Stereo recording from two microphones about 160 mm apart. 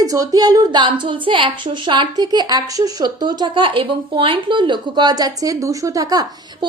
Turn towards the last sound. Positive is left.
turn(degrees=-25)  # may be behind; listen again after turning